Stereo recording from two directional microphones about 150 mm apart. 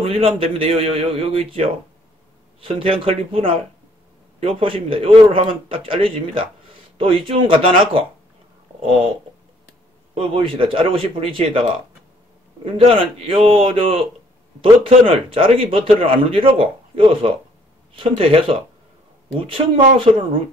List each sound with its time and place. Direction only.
0.0 s a man's voice: 35° right (ahead or behind)
10.1 s a man's voice: 35° right (ahead or behind)
20.0 s a man's voice: 35° right (ahead or behind)